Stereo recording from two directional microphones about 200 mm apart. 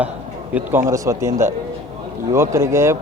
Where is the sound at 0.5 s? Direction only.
10° right (ahead or behind).